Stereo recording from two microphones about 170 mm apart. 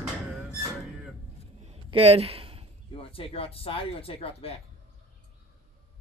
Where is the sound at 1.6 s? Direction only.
35° right (ahead or behind).